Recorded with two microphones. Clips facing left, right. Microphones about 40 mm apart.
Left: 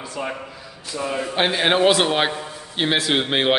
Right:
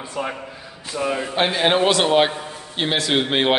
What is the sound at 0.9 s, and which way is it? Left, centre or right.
Speech, right.